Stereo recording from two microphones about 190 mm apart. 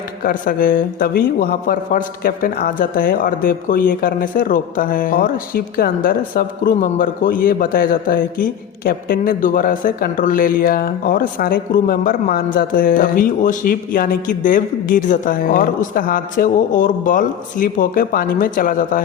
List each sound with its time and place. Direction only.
0.3 s a man's voice: 45° left (ahead or behind)